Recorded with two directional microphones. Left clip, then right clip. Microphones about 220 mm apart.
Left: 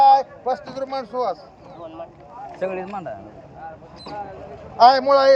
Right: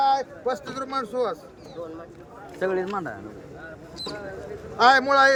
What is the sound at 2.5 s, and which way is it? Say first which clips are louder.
Speech: right 1 dB; 25° right (ahead or behind).